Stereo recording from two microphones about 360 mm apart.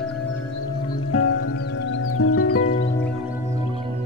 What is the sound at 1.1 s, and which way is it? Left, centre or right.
Music, left.